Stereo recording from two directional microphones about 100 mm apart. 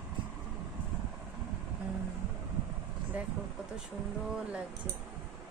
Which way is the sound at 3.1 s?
15° right (ahead or behind).